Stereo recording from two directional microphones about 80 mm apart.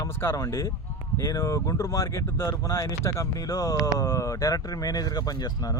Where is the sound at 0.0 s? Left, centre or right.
Left.